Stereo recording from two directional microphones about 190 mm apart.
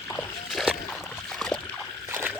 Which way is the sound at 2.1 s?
10° right (ahead or behind).